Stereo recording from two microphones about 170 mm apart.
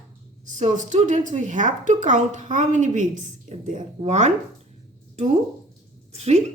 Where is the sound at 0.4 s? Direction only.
45° right (ahead or behind).